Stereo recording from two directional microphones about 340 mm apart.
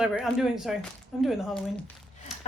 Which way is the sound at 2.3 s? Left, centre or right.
Centre.